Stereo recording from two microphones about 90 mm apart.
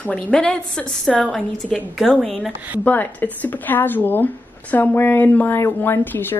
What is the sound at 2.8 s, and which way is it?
A woman's voice, 20° left (ahead or behind).